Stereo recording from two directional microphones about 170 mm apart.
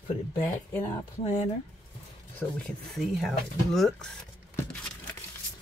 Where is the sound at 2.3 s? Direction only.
5° left (ahead or behind).